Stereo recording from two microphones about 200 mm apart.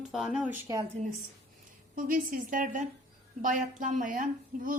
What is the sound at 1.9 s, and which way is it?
A woman's voice, 45° right (ahead or behind).